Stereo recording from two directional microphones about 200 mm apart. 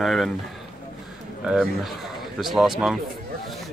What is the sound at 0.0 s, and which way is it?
Speech, centre (ahead or behind).